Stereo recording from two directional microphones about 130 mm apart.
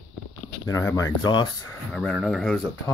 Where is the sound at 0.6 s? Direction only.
25° left (ahead or behind).